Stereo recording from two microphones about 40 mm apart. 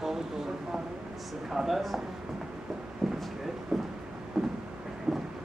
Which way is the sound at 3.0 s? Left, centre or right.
Centre.